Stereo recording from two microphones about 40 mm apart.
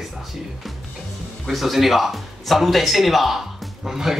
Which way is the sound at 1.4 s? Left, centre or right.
Centre.